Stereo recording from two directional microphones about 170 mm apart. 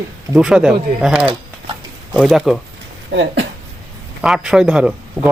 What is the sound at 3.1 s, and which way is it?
Speech, 90° right.